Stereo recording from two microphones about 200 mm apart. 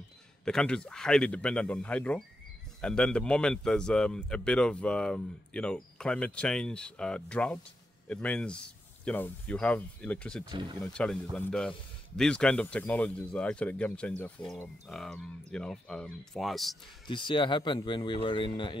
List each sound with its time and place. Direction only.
0.5 s speech: 5° left (ahead or behind)
10.5 s speech: 25° right (ahead or behind)
10.8 s speech: 5° left (ahead or behind)
17.1 s speech: 25° left (ahead or behind)